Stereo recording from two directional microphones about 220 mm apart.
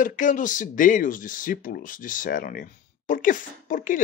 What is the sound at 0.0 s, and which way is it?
Speech, 35° left (ahead or behind).